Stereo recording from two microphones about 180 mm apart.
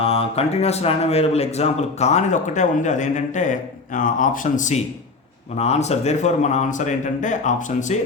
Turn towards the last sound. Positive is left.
turn(degrees=45)  # may be behind; listen again after turning